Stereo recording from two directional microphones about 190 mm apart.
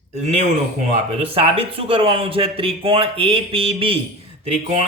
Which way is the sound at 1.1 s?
30° right (ahead or behind).